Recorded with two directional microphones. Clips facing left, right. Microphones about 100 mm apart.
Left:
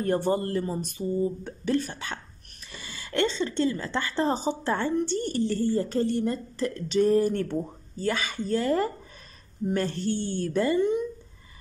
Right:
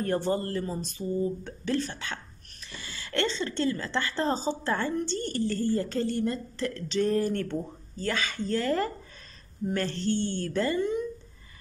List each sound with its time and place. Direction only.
0.0 s a woman's voice: 20° left (ahead or behind)